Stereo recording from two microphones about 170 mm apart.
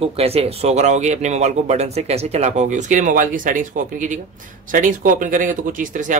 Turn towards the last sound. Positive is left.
turn(degrees=-50)  # may be behind; listen again after turning